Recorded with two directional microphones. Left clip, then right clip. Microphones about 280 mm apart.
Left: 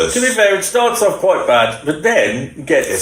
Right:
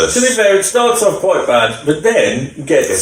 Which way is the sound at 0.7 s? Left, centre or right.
Centre.